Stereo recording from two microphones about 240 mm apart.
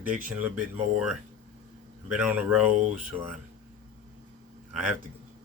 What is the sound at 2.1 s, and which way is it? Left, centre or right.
Speech, centre.